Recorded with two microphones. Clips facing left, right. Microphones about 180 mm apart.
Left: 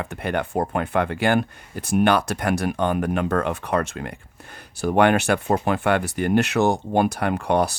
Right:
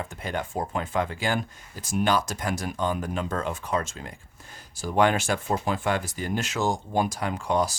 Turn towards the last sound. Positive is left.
turn(degrees=60)  # may be behind; listen again after turning